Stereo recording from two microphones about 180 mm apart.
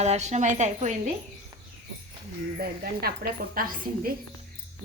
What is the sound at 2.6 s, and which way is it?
A woman's voice, 55° right (ahead or behind).